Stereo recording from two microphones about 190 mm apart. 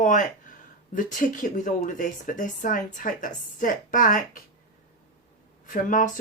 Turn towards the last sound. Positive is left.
turn(degrees=45)  # may be behind; listen again after turning